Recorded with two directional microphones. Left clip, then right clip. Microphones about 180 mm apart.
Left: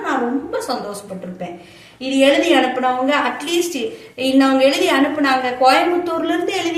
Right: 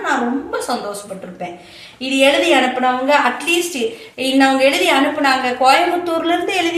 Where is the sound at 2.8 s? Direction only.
20° left (ahead or behind).